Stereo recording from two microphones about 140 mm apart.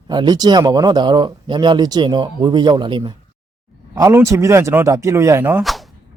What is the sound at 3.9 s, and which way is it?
Speech, 20° right (ahead or behind).